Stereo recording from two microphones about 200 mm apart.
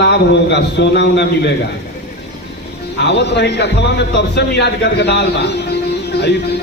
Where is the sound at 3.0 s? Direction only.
60° left (ahead or behind).